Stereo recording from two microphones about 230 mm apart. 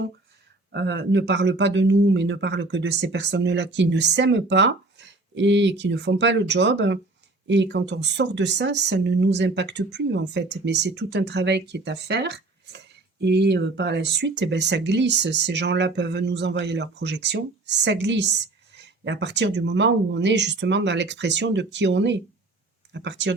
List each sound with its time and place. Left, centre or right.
0.7 s speech: right